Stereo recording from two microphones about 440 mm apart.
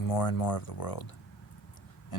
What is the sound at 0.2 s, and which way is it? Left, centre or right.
Speech, left.